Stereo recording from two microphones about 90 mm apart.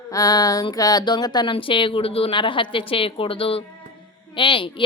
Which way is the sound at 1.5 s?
75° left (ahead or behind).